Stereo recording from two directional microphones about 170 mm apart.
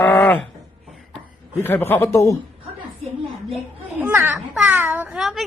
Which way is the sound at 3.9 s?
15° right (ahead or behind).